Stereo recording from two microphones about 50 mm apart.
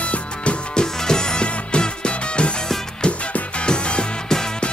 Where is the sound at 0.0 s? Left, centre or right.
Left.